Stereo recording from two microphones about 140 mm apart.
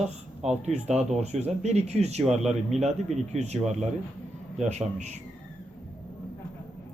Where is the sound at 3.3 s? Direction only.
55° right (ahead or behind).